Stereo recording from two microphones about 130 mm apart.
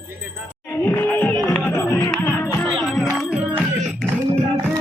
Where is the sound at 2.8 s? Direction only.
Centre (ahead or behind).